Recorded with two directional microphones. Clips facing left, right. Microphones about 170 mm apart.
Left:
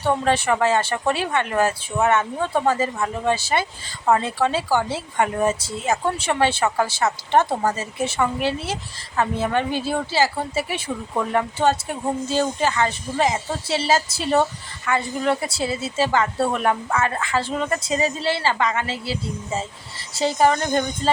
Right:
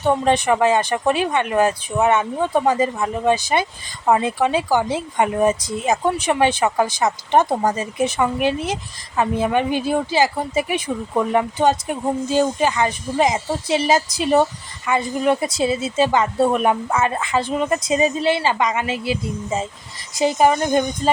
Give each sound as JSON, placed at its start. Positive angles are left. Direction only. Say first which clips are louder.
{"t": 0.0, "sound": "speech", "louder": "right 3 dB", "side_deg": -15}